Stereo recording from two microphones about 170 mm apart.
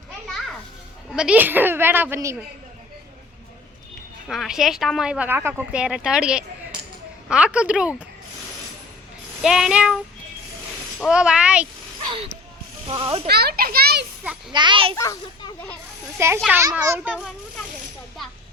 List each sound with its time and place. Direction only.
1.1 s a child's voice: 5° right (ahead or behind)
4.3 s a child's voice: centre (ahead or behind)
9.4 s speech: 5° right (ahead or behind)
11.0 s speech: 5° right (ahead or behind)
12.9 s a child's voice: 25° right (ahead or behind)
13.2 s a child's voice: 70° right (ahead or behind)
14.5 s a child's voice: 25° right (ahead or behind)
14.9 s a child's voice: 20° left (ahead or behind)
16.1 s a child's voice: 15° right (ahead or behind)